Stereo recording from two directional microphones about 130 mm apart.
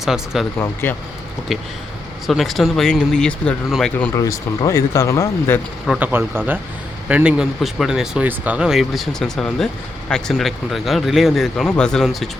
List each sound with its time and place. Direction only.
0.0 s speech: centre (ahead or behind)
0.6 s speech: 15° left (ahead or behind)
1.5 s speech: centre (ahead or behind)
4.1 s speech: 25° left (ahead or behind)
6.0 s speech: 15° right (ahead or behind); by 12.3 s centre (ahead or behind)